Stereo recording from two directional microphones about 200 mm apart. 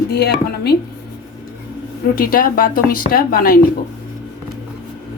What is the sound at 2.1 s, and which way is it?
A woman's voice, 45° left (ahead or behind).